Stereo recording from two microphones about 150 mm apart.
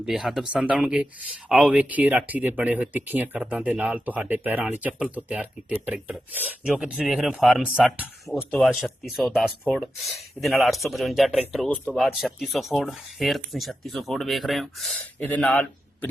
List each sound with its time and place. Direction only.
0.0 s speech: centre (ahead or behind)
8.4 s a man's voice: 10° left (ahead or behind)